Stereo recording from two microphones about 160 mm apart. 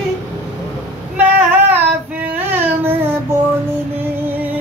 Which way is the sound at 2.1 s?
10° right (ahead or behind).